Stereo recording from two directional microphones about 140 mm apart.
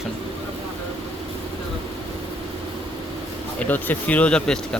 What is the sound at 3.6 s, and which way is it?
Speech, 10° left (ahead or behind).